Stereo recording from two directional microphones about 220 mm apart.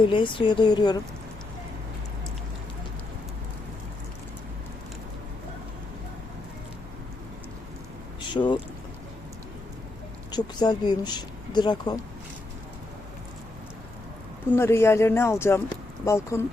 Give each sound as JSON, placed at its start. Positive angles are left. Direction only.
{"t": 0.0, "sound": "speech", "side_deg": 20}
{"t": 8.2, "sound": "a sound", "side_deg": 20}
{"t": 10.3, "sound": "speech", "side_deg": 20}
{"t": 14.5, "sound": "speech", "side_deg": 10}